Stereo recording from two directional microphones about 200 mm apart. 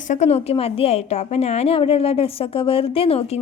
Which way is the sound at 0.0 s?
35° left (ahead or behind).